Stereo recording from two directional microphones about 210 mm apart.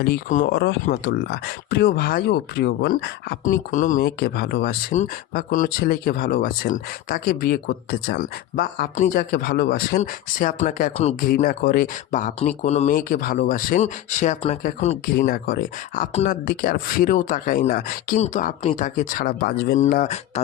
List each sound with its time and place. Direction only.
0.0 s speech: 40° left (ahead or behind)
0.5 s speech: 50° left (ahead or behind)
4.2 s speech: 50° left (ahead or behind); by 14.9 s 30° left (ahead or behind)
15.1 s speech: 45° left (ahead or behind)
19.8 s speech: 35° left (ahead or behind)